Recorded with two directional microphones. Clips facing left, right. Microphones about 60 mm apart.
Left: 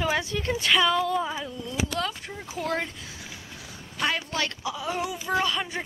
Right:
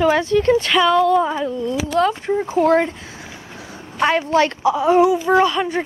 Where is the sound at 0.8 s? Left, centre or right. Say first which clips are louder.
Right 9 dB; centre.